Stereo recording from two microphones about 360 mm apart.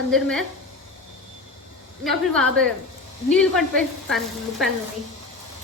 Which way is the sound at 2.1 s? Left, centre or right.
Centre.